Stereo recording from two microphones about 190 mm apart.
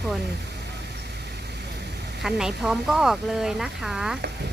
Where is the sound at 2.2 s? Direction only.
Centre (ahead or behind).